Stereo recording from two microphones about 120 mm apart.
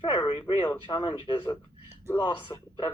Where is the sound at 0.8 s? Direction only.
40° left (ahead or behind).